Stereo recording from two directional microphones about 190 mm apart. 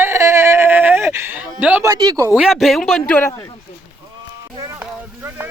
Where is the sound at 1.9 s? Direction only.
20° right (ahead or behind).